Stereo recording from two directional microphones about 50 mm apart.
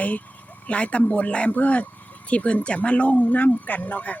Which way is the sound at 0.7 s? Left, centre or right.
Left.